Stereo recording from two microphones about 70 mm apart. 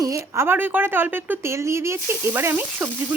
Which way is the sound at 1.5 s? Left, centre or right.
Right.